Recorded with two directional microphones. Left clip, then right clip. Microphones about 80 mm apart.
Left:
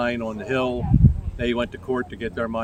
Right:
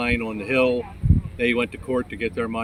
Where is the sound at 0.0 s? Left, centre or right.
Left.